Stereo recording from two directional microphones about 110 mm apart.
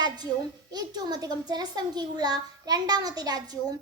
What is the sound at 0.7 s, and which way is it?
A child's voice, 40° right (ahead or behind).